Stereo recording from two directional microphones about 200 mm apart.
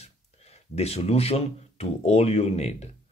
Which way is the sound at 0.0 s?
30° left (ahead or behind).